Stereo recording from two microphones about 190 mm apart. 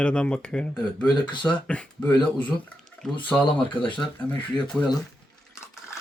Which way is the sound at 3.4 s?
25° left (ahead or behind).